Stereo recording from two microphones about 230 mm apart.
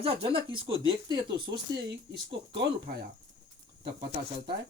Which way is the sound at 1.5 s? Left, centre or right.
Right.